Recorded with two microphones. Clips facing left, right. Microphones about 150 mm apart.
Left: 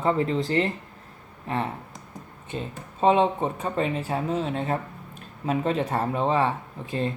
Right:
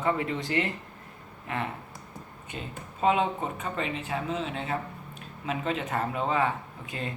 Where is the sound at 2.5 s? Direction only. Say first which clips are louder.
Left 6 dB; 30° left (ahead or behind).